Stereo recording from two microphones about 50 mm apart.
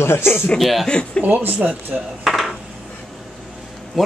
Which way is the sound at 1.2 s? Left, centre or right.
Right.